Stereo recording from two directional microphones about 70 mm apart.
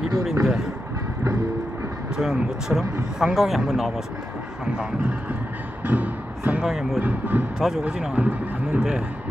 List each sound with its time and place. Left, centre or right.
0.2 s a sound: centre
2.1 s speech: centre
5.9 s music: right
6.6 s speech: centre
7.0 s speech: right
7.5 s speech: centre
7.8 s speech: centre